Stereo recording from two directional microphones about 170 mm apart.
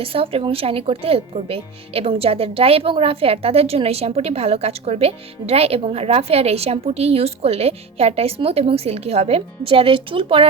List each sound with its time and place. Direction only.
0.0 s speech: 35° right (ahead or behind)